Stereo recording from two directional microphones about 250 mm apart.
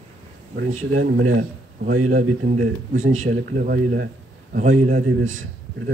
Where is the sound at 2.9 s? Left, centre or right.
Right.